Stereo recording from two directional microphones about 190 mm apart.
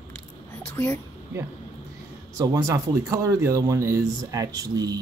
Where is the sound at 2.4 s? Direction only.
15° right (ahead or behind).